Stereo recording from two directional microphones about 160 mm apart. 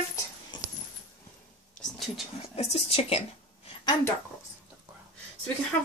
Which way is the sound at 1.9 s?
Centre (ahead or behind).